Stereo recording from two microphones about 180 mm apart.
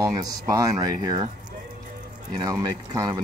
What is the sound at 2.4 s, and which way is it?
Speech, 20° right (ahead or behind).